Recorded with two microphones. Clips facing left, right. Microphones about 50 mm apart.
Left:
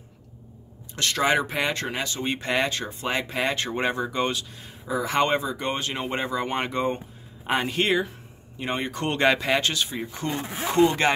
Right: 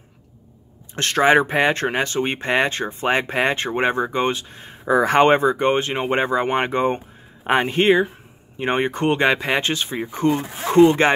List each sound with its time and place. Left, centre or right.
0.9 s speech: right
4.8 s speech: right
9.0 s speech: centre
10.7 s speech: centre